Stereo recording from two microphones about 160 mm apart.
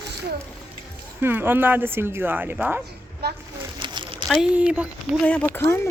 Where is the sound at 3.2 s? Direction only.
90° right.